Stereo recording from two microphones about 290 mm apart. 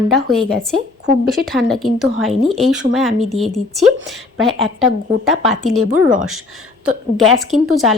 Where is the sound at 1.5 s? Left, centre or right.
Centre.